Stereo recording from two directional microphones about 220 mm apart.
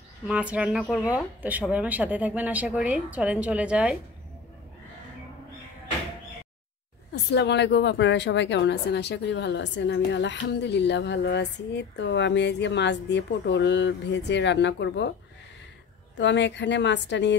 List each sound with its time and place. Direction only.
0.3 s speech: 5° right (ahead or behind)
7.3 s a woman's voice: 50° left (ahead or behind)
16.2 s a woman's voice: 55° left (ahead or behind)